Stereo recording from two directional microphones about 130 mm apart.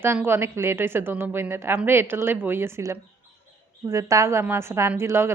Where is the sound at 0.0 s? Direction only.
20° right (ahead or behind).